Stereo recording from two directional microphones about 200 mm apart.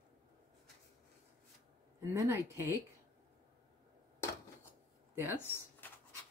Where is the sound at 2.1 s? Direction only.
15° right (ahead or behind).